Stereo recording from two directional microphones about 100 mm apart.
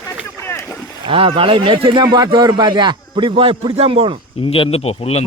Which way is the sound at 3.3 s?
65° right (ahead or behind).